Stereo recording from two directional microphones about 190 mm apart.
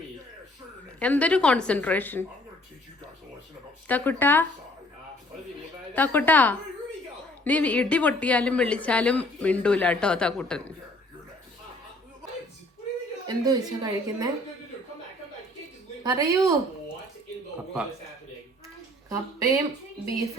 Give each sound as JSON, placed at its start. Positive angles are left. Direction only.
{"t": 0.9, "sound": "speech", "side_deg": 5}
{"t": 3.8, "sound": "speech", "side_deg": 10}
{"t": 5.9, "sound": "speech", "side_deg": 10}
{"t": 13.2, "sound": "a woman's voice", "side_deg": -20}
{"t": 16.0, "sound": "speech", "side_deg": -15}
{"t": 19.0, "sound": "speech", "side_deg": -15}